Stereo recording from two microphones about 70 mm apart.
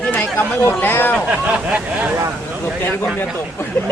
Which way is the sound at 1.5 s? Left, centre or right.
Centre.